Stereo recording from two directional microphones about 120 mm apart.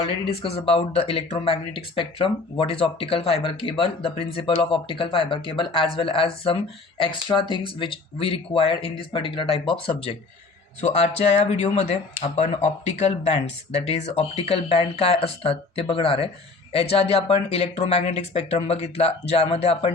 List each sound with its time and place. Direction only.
0.4 s speech: 55° left (ahead or behind)
10.8 s speech: 65° left (ahead or behind)